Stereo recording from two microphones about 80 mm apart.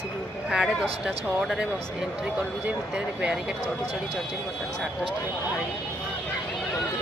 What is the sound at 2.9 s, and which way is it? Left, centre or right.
Speech, centre.